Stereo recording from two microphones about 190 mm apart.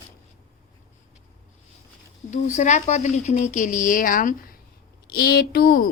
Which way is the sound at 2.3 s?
40° left (ahead or behind).